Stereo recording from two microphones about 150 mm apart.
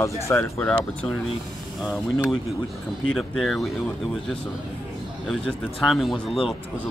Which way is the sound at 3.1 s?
Centre (ahead or behind).